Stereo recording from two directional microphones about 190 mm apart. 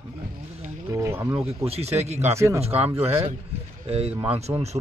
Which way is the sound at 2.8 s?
10° right (ahead or behind).